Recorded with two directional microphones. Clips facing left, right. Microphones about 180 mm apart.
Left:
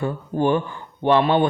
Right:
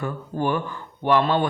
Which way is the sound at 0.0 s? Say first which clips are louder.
Left 4 dB; 25° left (ahead or behind).